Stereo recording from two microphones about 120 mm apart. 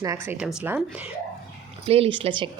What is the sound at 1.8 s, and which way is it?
Speech, 55° right (ahead or behind).